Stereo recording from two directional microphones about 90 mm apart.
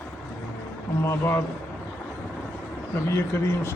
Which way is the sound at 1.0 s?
30° left (ahead or behind).